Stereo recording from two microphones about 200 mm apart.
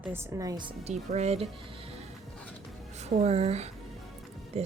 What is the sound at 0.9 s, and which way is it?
Speech, 35° right (ahead or behind).